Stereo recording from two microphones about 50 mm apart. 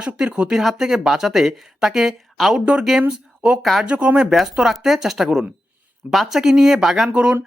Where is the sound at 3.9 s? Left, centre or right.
Right.